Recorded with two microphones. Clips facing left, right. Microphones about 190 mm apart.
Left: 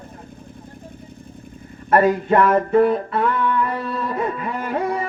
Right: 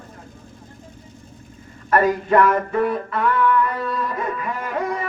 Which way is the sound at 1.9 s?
30° left (ahead or behind).